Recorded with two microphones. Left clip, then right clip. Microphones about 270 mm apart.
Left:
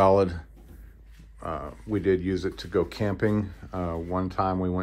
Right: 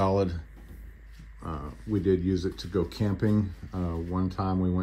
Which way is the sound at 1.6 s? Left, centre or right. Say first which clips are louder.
Left 2 dB; left.